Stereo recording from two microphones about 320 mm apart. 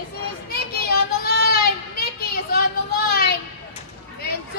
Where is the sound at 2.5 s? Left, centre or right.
Left.